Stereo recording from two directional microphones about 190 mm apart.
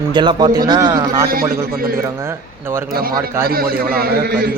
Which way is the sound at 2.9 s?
50° right (ahead or behind).